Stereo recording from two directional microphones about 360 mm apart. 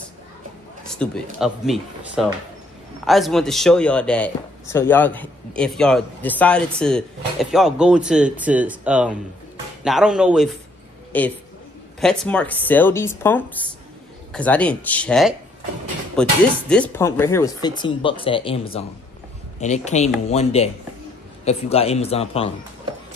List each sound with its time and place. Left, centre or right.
1.0 s speech: centre
19.6 s speech: centre